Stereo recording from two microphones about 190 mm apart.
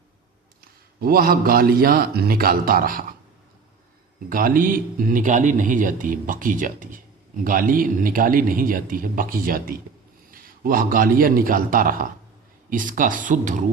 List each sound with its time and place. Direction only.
0.6 s a man's voice: 50° right (ahead or behind)
4.3 s a man's voice: 45° right (ahead or behind)